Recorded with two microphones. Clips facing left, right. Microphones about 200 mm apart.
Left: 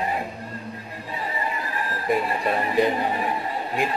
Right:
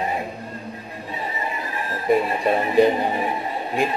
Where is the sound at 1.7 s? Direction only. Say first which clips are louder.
Right 5 dB; 25° right (ahead or behind).